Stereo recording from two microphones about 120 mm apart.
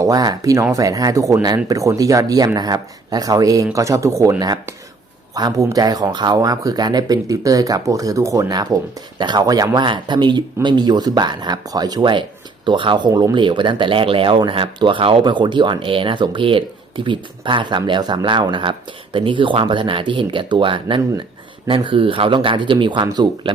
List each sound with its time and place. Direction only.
0.0 s speech: 30° right (ahead or behind)